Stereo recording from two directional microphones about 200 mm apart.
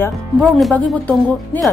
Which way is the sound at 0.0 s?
5° left (ahead or behind).